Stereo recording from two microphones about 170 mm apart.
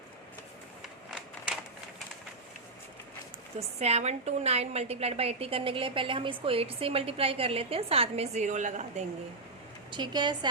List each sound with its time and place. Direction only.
3.8 s a woman's voice: 40° right (ahead or behind)
9.9 s a woman's voice: 25° right (ahead or behind)